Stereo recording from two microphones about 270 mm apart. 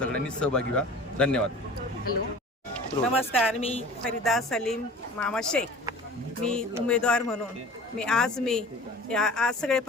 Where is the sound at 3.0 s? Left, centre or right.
Centre.